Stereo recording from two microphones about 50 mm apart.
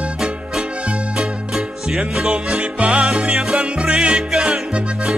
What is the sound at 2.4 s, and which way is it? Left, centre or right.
Music, centre.